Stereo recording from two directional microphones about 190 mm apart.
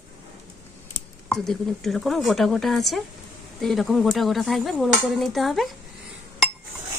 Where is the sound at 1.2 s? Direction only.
Centre (ahead or behind).